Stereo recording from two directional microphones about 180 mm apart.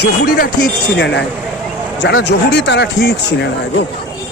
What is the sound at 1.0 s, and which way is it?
Speech, 75° left (ahead or behind).